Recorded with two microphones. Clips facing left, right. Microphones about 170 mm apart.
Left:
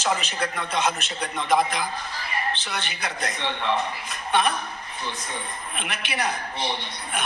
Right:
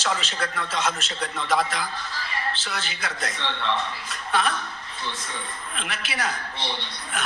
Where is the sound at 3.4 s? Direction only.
15° left (ahead or behind).